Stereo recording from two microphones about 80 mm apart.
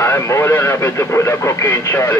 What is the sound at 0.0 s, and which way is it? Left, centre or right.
Speech, left.